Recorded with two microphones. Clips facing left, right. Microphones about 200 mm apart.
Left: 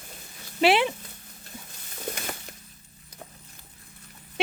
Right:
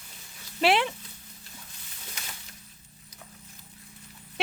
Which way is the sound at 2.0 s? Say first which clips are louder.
Left 12 dB; 55° left (ahead or behind).